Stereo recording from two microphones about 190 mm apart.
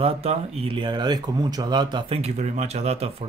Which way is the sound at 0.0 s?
30° right (ahead or behind).